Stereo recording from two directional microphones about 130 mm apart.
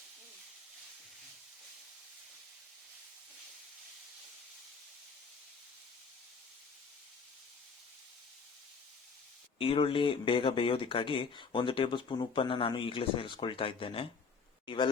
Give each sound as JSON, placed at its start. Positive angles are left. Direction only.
{"t": 9.6, "sound": "speech", "side_deg": 45}